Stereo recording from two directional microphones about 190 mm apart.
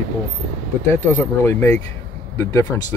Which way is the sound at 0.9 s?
10° left (ahead or behind).